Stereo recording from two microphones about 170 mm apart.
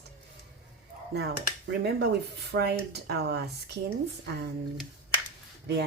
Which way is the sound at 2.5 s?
75° right (ahead or behind).